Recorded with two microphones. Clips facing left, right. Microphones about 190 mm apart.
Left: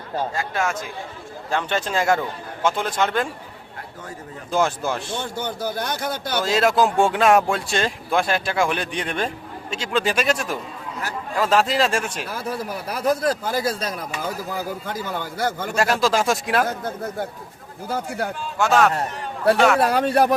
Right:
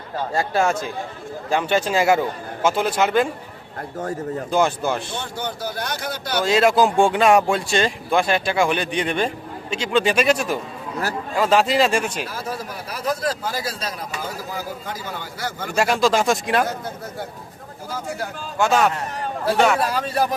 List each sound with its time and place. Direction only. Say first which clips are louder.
0.3 s speech: right 5 dB; 35° right (ahead or behind)
1.5 s speech: right 4 dB; 10° right (ahead or behind)
4.5 s speech: right 1 dB; centre (ahead or behind)
5.4 s a man's voice: even; 50° left (ahead or behind)
6.4 s speech: right 2 dB; centre (ahead or behind)
12.5 s a man's voice: left 2 dB; 55° left (ahead or behind)
15.7 s speech: right 3 dB; centre (ahead or behind)
17.8 s speech: left 3 dB; 60° left (ahead or behind)
18.6 s speech: left 1 dB; centre (ahead or behind)
19.8 s speech: left 4 dB; 60° left (ahead or behind)